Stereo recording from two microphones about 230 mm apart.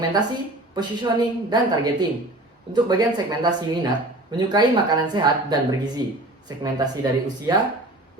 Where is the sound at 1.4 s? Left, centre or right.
Centre.